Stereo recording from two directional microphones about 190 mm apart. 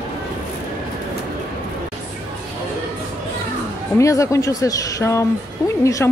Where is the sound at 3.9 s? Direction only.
15° left (ahead or behind).